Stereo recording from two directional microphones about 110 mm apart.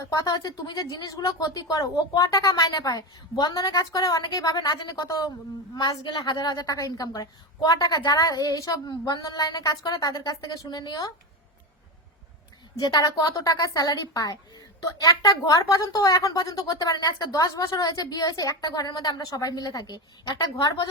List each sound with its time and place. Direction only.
0.0 s a woman's voice: 35° left (ahead or behind)
12.8 s a woman's voice: 35° left (ahead or behind)